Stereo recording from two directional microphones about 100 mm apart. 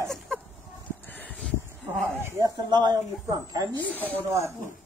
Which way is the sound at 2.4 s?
45° right (ahead or behind).